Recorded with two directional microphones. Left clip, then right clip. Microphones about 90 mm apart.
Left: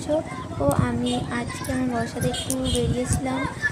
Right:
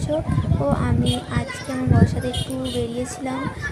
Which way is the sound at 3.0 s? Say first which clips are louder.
Left 1 dB; centre (ahead or behind).